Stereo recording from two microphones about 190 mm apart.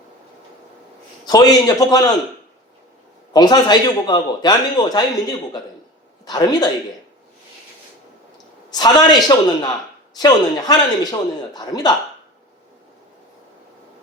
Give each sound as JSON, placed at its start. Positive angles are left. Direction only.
{"t": 1.2, "sound": "a man's voice", "side_deg": 20}
{"t": 3.3, "sound": "a man's voice", "side_deg": 20}
{"t": 6.2, "sound": "a man's voice", "side_deg": 20}
{"t": 8.7, "sound": "a man's voice", "side_deg": 20}